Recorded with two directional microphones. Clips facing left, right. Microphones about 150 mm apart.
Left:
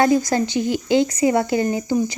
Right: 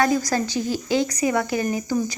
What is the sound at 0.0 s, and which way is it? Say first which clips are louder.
Speech: left 4 dB; 25° left (ahead or behind).